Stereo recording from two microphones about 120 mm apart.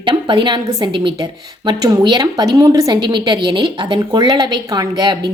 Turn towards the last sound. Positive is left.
turn(degrees=-35)  # may be behind; listen again after turning